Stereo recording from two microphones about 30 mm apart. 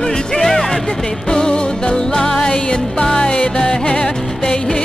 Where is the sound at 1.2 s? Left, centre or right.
Left.